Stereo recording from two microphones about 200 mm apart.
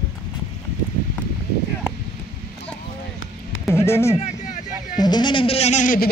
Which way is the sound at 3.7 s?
15° left (ahead or behind).